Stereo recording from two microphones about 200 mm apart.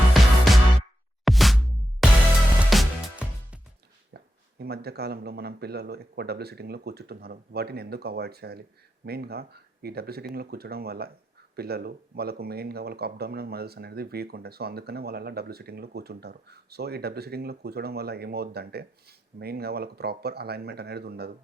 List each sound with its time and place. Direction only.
0.1 s music: centre (ahead or behind)
4.1 s speech: 55° right (ahead or behind)